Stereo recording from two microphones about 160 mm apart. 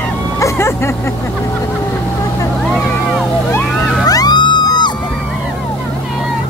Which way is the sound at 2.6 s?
5° left (ahead or behind).